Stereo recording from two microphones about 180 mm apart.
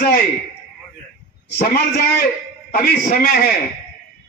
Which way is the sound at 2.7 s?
50° left (ahead or behind).